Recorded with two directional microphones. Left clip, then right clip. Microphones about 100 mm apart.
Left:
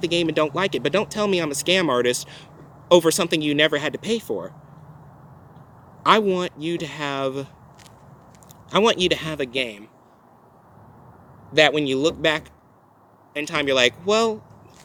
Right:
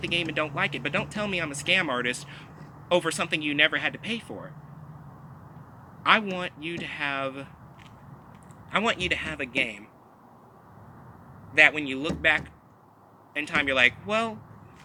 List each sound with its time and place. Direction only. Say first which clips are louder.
0.1 s speech: left 5 dB; 35° left (ahead or behind)
6.0 s speech: left 5 dB; 35° left (ahead or behind)
8.7 s speech: left 7 dB; 25° left (ahead or behind)
11.7 s speech: left 9 dB; 30° left (ahead or behind)